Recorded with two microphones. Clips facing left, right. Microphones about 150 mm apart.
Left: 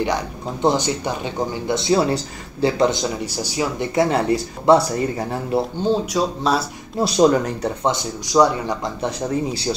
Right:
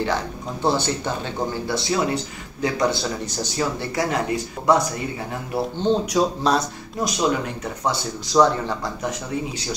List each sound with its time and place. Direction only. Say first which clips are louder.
0.0 s speech: left 2 dB; 15° left (ahead or behind)
2.9 s speech: left 2 dB; 15° left (ahead or behind)
3.9 s speech: left 9 dB; 25° left (ahead or behind)
4.3 s speech: left 5 dB; 35° left (ahead or behind)
6.0 s speech: even; centre (ahead or behind)
7.0 s speech: left 7 dB; 30° left (ahead or behind)
7.9 s speech: left 2 dB; 15° left (ahead or behind)
9.0 s speech: left 8 dB; 30° left (ahead or behind)